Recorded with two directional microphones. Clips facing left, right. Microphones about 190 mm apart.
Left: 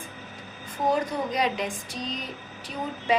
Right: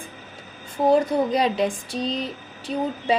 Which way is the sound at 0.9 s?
30° right (ahead or behind).